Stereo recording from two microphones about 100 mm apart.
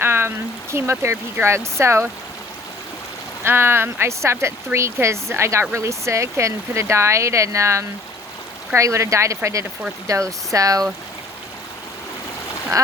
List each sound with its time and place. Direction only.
0.0 s speech: 25° right (ahead or behind)
3.4 s speech: 25° right (ahead or behind)
12.7 s speech: 35° right (ahead or behind)